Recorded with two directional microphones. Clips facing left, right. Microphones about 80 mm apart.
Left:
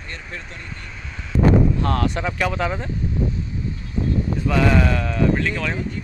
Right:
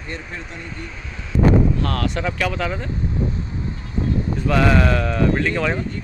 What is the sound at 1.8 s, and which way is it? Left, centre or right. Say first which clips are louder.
Speech: left 1 dB; left.